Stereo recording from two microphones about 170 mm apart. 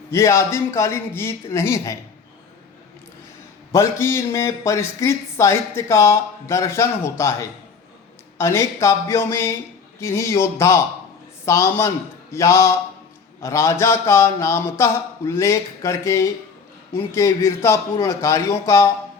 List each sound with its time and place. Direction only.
0.1 s a man's voice: 15° left (ahead or behind)
3.7 s a man's voice: 15° left (ahead or behind)